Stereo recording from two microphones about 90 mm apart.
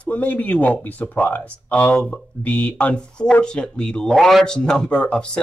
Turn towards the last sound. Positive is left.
turn(degrees=10)  # may be behind; listen again after turning